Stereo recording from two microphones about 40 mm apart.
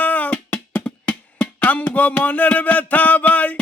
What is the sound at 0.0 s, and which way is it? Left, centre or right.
Music, left.